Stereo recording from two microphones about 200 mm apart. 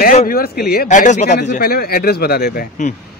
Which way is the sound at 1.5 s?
50° left (ahead or behind).